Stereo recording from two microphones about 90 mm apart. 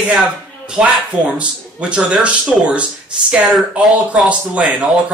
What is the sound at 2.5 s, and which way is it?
Speech, centre (ahead or behind).